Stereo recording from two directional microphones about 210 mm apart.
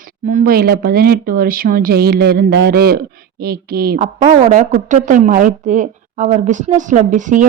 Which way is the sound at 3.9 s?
30° right (ahead or behind).